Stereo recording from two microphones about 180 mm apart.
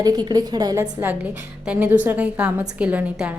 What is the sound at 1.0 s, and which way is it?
A woman's voice, 10° right (ahead or behind).